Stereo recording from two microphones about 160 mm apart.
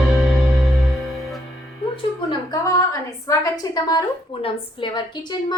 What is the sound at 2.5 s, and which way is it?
A woman's voice, 20° left (ahead or behind).